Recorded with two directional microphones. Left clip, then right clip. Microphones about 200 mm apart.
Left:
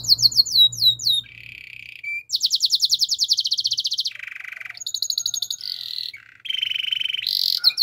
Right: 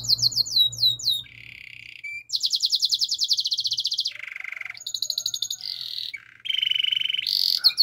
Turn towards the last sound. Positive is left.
turn(degrees=15)  # may be behind; listen again after turning